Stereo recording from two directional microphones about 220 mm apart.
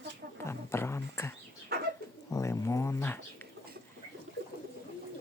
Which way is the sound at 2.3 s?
15° left (ahead or behind).